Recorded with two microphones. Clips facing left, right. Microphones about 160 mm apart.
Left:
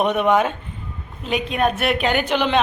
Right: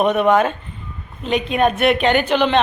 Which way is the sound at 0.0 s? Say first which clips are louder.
Right 3 dB; 10° left (ahead or behind).